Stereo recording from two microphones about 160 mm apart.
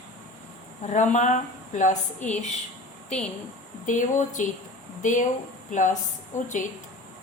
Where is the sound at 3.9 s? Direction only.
50° left (ahead or behind).